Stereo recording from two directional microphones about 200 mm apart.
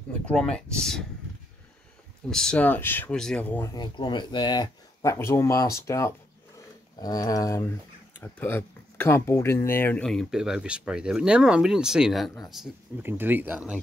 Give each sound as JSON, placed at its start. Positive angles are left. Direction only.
{"t": 0.2, "sound": "speech", "side_deg": 5}
{"t": 2.2, "sound": "speech", "side_deg": 5}
{"t": 3.7, "sound": "speech", "side_deg": 20}